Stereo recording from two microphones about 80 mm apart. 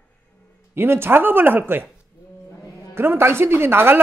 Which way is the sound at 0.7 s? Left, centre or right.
Right.